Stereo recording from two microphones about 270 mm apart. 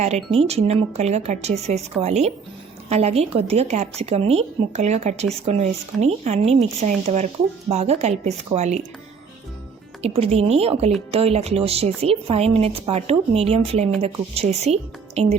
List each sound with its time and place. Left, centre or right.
0.3 s speech: right
10.0 s speech: right